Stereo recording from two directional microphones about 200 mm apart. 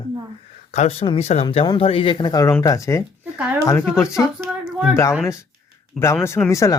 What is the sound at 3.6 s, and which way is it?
Speech, 10° left (ahead or behind).